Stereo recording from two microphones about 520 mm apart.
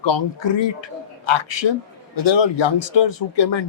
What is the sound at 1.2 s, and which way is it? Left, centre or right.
A man's voice, left.